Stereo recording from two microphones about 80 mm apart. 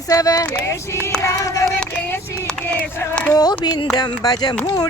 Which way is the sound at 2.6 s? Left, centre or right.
Centre.